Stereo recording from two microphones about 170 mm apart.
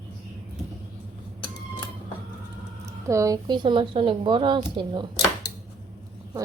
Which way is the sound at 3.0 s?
20° right (ahead or behind).